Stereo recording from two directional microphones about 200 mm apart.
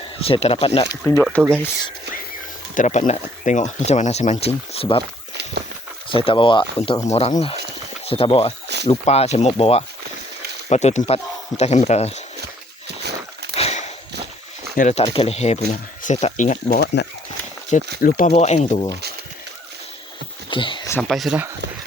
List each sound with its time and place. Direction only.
0.0 s speech: 30° left (ahead or behind)
1.0 s speech: 10° left (ahead or behind)
1.4 s speech: 10° right (ahead or behind)
2.7 s speech: 40° left (ahead or behind)
5.3 s a sound: 60° right (ahead or behind)
6.1 s speech: 25° left (ahead or behind)
12.9 s a sound: 55° right (ahead or behind)
13.6 s a sound: 35° left (ahead or behind)
14.8 s speech: 35° left (ahead or behind); by 17.1 s 55° left (ahead or behind)
18.0 s speech: 40° left (ahead or behind)
20.5 s speech: 25° left (ahead or behind)
21.1 s speech: centre (ahead or behind)